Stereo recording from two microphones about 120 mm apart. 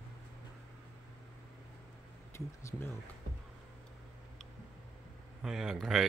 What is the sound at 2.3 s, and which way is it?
Speech, 20° left (ahead or behind).